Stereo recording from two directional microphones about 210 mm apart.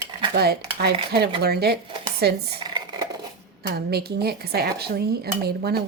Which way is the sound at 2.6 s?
20° right (ahead or behind).